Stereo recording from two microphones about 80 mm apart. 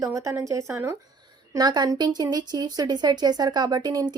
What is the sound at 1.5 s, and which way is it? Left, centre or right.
A woman's voice, right.